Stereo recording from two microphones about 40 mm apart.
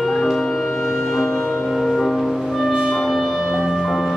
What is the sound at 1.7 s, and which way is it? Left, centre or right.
Music, centre.